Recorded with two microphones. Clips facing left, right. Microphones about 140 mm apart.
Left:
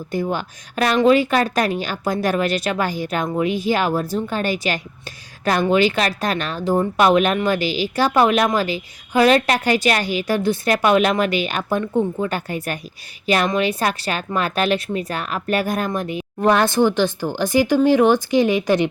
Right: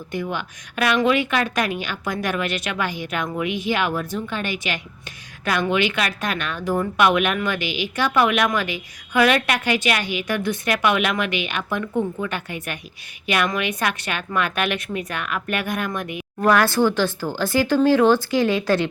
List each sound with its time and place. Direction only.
0.1 s a woman's voice: 35° left (ahead or behind); by 18.9 s 15° left (ahead or behind)